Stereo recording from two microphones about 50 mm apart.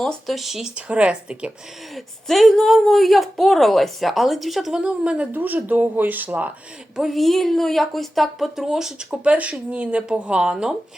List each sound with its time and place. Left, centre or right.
0.0 s speech: centre
0.9 s speech: right
2.2 s speech: centre
4.7 s speech: centre
5.3 s speech: right
7.1 s speech: centre
9.2 s speech: right